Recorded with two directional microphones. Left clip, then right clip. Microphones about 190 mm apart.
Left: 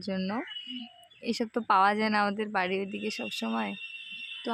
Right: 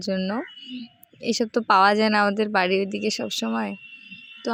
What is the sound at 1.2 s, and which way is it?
Speech, 25° right (ahead or behind).